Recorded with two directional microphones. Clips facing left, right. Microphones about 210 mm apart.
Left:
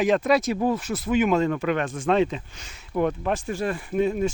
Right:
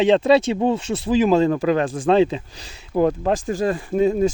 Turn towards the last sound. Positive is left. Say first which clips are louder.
# right 5 dB
turn(degrees=-35)  # may be behind; listen again after turning